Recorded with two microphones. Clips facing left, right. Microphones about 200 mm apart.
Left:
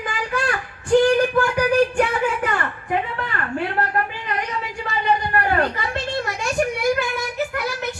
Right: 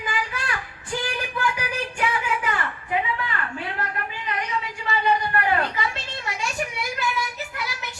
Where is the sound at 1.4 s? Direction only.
50° left (ahead or behind).